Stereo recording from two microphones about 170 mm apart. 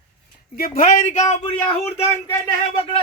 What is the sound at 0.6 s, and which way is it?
Speech, 50° left (ahead or behind).